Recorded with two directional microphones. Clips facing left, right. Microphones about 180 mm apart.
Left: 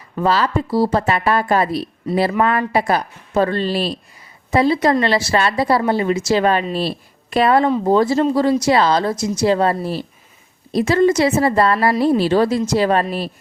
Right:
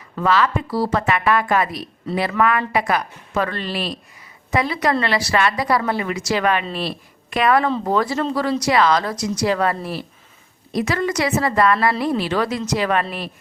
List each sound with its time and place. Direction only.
0.2 s a woman's voice: 30° left (ahead or behind)